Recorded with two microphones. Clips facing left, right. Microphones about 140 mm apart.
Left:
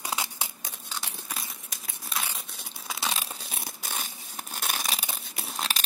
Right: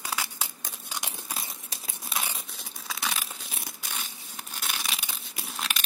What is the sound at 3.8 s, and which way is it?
Tearing, 45° left (ahead or behind).